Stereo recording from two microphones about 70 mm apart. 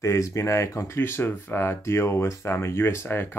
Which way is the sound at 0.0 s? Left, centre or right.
Left.